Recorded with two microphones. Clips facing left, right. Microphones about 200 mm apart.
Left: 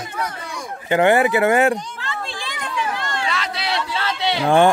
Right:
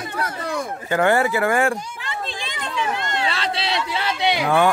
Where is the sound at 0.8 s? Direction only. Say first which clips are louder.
Left 3 dB; 20° left (ahead or behind).